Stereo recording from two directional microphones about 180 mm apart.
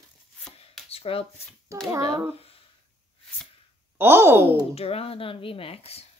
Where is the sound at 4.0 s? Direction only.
15° right (ahead or behind).